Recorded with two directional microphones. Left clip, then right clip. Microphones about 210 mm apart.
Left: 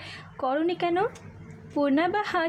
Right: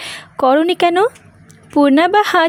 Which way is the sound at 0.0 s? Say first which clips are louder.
Right 15 dB; 45° right (ahead or behind).